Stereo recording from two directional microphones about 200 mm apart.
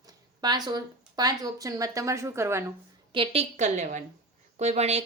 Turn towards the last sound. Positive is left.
turn(degrees=-35)  # may be behind; listen again after turning